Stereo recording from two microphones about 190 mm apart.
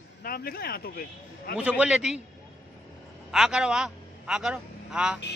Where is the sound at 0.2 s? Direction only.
50° left (ahead or behind).